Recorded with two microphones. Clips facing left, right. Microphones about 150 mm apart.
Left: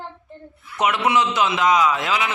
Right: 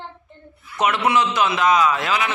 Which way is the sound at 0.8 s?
15° left (ahead or behind).